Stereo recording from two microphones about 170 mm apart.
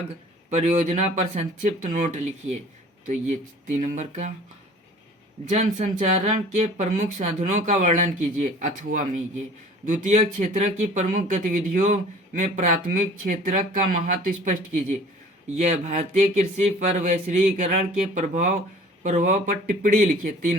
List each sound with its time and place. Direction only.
0.5 s speech: 45° right (ahead or behind)
3.8 s speech: 40° right (ahead or behind)
5.5 s speech: 45° right (ahead or behind)